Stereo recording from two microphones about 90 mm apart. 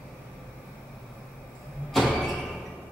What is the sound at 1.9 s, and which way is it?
Door, centre (ahead or behind).